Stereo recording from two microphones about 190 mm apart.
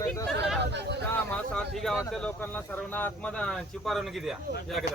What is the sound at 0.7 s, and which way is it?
Speech, 65° right (ahead or behind).